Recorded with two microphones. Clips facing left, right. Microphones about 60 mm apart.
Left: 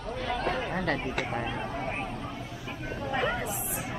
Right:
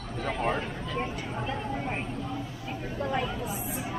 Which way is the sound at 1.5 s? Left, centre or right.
Centre.